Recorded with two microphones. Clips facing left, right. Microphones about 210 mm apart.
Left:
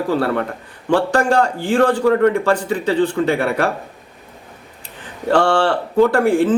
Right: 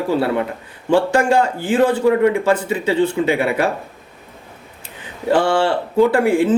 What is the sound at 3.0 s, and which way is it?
Speech, 20° right (ahead or behind).